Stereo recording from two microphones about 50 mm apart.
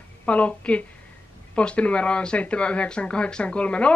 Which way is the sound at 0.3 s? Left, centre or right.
Left.